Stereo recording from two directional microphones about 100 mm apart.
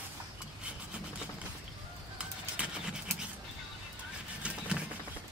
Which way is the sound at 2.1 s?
10° right (ahead or behind).